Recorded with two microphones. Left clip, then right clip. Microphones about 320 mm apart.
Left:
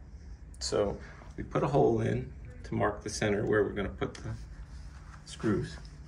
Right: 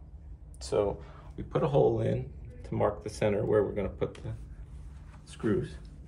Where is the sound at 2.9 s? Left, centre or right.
Right.